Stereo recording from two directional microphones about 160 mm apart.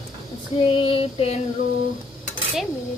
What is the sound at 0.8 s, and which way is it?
Female singing, 35° left (ahead or behind).